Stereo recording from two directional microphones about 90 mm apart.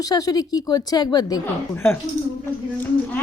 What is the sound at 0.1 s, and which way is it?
A woman's voice, 45° left (ahead or behind).